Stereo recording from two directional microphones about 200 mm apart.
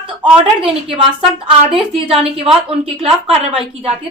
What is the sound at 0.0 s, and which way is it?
Speech, 25° right (ahead or behind).